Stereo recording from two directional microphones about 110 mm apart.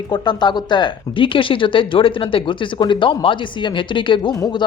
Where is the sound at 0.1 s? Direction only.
40° left (ahead or behind).